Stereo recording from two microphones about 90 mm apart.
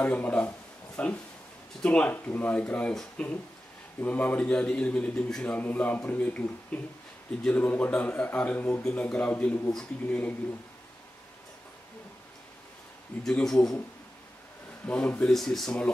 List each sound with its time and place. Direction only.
0.0 s speech: 20° left (ahead or behind)
13.2 s speech: 5° left (ahead or behind)
14.9 s speech: 15° left (ahead or behind)
15.3 s speech: 5° left (ahead or behind)